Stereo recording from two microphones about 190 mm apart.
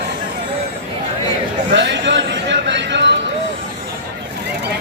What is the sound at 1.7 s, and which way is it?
Music, 65° right (ahead or behind).